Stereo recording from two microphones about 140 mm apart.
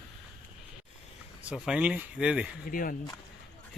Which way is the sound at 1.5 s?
5° right (ahead or behind).